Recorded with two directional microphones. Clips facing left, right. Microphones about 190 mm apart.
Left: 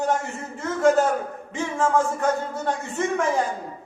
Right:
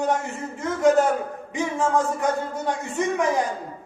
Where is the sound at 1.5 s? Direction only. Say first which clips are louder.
Even; 15° right (ahead or behind).